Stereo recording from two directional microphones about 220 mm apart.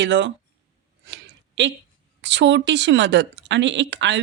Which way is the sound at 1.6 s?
55° right (ahead or behind).